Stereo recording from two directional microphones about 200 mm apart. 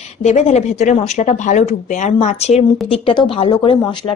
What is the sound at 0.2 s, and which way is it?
A woman's voice, 35° left (ahead or behind).